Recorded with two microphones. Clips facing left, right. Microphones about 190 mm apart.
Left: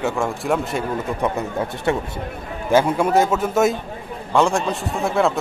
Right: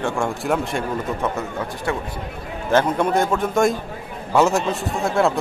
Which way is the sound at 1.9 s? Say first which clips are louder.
Left 4 dB; 25° left (ahead or behind).